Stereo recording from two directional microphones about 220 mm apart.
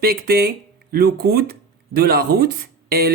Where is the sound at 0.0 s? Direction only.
45° right (ahead or behind).